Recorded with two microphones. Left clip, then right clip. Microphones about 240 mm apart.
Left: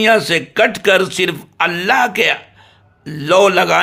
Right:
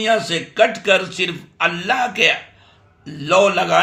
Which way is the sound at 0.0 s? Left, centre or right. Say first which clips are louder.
Left 6 dB; left.